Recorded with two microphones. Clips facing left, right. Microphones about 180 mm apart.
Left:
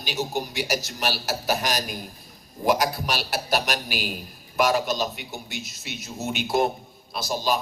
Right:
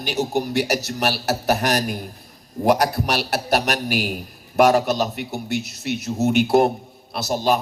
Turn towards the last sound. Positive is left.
turn(degrees=-60)  # may be behind; listen again after turning